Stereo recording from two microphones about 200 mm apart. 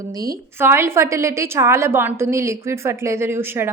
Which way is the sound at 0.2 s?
15° right (ahead or behind).